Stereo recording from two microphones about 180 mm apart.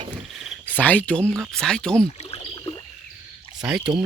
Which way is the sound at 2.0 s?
30° left (ahead or behind).